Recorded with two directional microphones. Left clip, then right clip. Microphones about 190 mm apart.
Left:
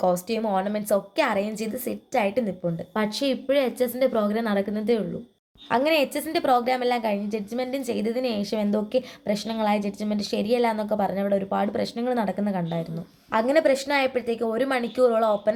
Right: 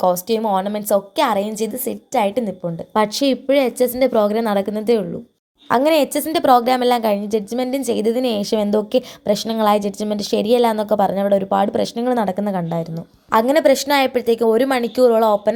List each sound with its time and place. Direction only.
0.0 s a woman's voice: 25° right (ahead or behind)
2.9 s a woman's voice: 40° right (ahead or behind)